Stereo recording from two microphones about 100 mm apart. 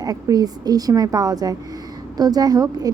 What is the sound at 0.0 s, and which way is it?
A woman's voice, 40° right (ahead or behind).